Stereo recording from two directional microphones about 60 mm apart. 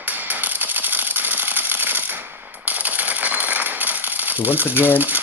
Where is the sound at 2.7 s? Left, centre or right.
Right.